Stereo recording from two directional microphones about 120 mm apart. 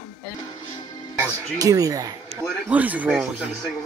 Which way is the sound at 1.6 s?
30° right (ahead or behind).